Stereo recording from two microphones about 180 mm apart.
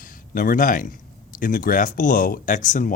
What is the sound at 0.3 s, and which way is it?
Speech, 50° left (ahead or behind).